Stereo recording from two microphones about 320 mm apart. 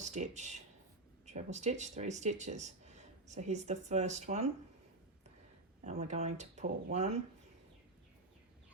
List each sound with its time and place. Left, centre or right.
0.0 s speech: right
5.8 s speech: right